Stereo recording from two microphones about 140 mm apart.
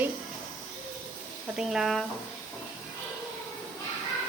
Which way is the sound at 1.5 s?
5° right (ahead or behind).